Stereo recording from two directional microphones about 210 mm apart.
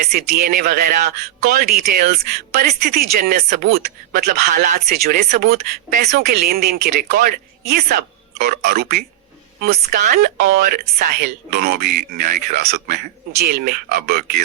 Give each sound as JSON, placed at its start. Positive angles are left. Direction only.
{"t": 0.0, "sound": "speech", "side_deg": -45}